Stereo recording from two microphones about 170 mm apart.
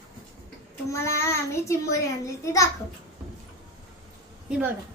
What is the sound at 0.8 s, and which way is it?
Speech, 15° left (ahead or behind).